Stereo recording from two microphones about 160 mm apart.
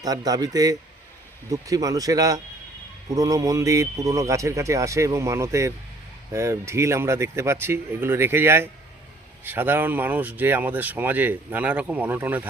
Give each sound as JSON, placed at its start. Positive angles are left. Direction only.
{"t": 0.0, "sound": "speech", "side_deg": -25}